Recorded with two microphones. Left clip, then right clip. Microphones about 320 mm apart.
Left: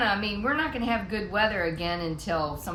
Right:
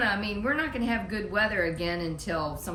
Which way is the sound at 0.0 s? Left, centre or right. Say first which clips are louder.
Left 2 dB; centre.